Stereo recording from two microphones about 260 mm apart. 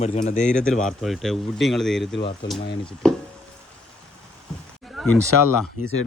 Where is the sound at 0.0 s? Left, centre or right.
Left.